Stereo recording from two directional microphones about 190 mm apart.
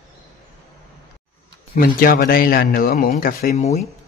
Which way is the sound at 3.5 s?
35° left (ahead or behind).